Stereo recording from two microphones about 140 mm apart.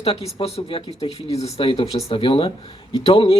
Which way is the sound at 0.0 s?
45° left (ahead or behind).